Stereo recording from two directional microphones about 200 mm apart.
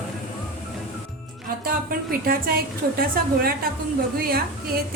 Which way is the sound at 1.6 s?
45° right (ahead or behind).